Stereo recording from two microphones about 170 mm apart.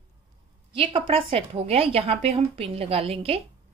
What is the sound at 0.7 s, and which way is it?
A woman's voice, 30° right (ahead or behind).